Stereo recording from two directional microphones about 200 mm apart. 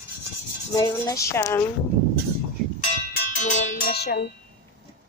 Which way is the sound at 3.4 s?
40° left (ahead or behind).